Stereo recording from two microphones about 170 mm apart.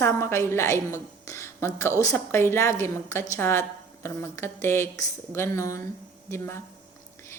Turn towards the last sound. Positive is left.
turn(degrees=15)  # may be behind; listen again after turning